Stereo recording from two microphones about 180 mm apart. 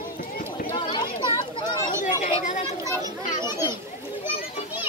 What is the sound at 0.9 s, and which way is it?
Chatter, 25° left (ahead or behind).